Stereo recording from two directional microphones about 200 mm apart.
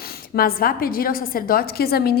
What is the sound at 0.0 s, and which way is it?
A woman's voice, 50° left (ahead or behind).